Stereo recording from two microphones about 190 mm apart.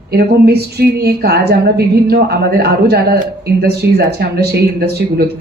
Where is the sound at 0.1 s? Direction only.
60° right (ahead or behind).